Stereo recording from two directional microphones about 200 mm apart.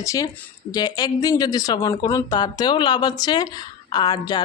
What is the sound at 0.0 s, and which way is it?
Speech, 15° left (ahead or behind).